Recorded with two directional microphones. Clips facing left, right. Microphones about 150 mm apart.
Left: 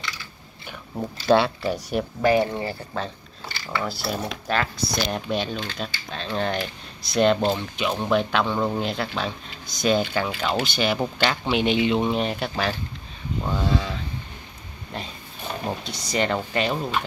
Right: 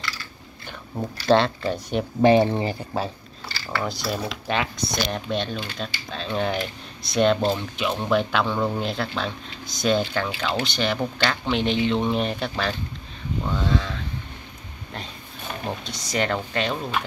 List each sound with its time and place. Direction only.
1.2 s speech: 10° left (ahead or behind)
2.2 s speech: 25° right (ahead or behind)
3.8 s speech: 5° left (ahead or behind)
15.6 s speech: centre (ahead or behind)